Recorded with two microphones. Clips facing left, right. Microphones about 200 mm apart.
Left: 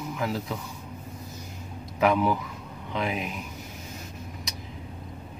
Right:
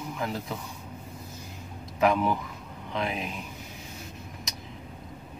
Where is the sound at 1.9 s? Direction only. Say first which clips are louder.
Left 1 dB; 5° left (ahead or behind).